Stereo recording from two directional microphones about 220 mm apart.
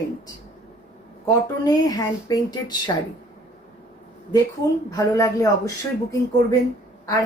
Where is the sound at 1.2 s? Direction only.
15° left (ahead or behind).